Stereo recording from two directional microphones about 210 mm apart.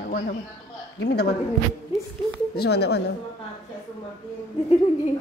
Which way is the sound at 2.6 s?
50° left (ahead or behind).